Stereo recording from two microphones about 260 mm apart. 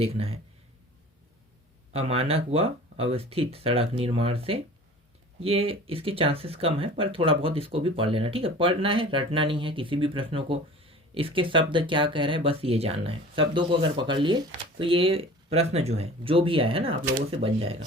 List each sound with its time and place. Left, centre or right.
0.0 s speech: right
1.9 s speech: right